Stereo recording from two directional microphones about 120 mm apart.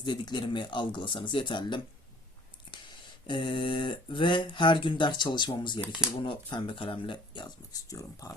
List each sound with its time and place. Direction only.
0.0 s speech: 40° left (ahead or behind)